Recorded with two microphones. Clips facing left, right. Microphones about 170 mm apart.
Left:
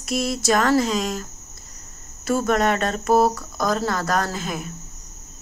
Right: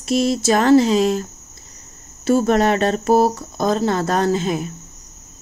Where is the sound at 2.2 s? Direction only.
30° right (ahead or behind).